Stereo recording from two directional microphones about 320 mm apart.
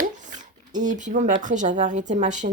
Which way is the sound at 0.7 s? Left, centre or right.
Right.